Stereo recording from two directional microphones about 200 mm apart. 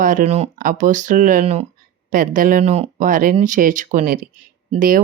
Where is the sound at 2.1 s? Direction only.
45° right (ahead or behind).